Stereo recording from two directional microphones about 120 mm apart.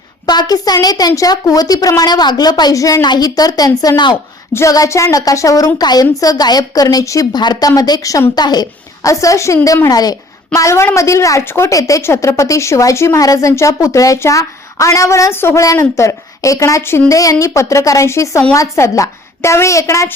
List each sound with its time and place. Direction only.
0.3 s a woman's voice: 35° left (ahead or behind)